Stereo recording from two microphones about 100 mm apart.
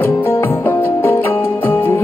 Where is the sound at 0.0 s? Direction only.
20° left (ahead or behind).